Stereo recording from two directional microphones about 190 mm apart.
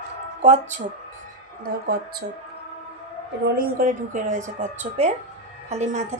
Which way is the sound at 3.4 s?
50° right (ahead or behind).